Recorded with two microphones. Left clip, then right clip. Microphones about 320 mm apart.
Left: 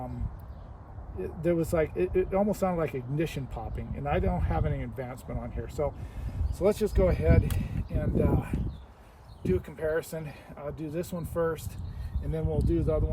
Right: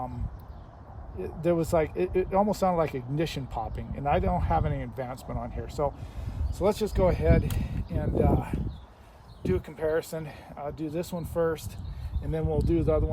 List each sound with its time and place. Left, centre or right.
1.2 s speech: centre